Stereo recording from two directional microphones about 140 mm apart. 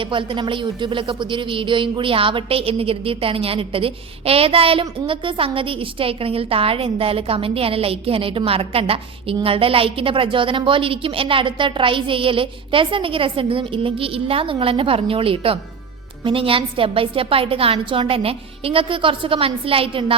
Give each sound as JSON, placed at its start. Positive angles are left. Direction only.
{"t": 0.0, "sound": "speech", "side_deg": -35}